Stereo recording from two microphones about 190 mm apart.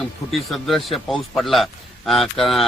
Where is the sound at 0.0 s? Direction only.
Centre (ahead or behind).